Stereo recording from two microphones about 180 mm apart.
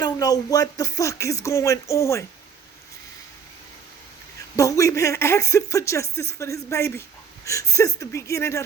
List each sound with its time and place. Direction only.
0.0 s speech: 20° left (ahead or behind)
4.5 s speech: 20° left (ahead or behind)